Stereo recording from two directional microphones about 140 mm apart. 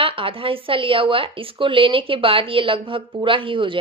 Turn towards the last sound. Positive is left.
turn(degrees=-40)  # may be behind; listen again after turning